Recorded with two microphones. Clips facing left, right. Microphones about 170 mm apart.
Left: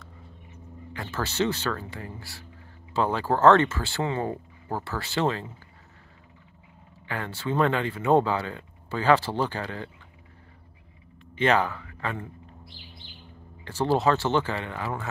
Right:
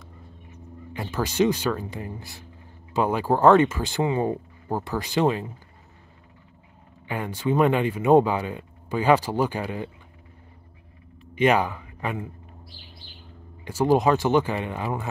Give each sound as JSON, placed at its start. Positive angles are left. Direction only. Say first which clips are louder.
{"t": 0.9, "sound": "speech", "louder": "right 5 dB", "side_deg": -15}
{"t": 7.1, "sound": "speech", "louder": "right 5 dB", "side_deg": -15}
{"t": 11.3, "sound": "speech", "louder": "right 3 dB", "side_deg": -15}
{"t": 13.7, "sound": "speech", "louder": "right 3 dB", "side_deg": -15}